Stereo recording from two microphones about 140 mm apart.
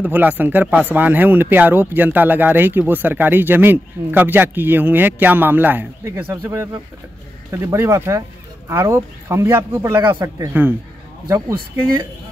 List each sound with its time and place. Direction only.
0.0 s speech: 15° right (ahead or behind)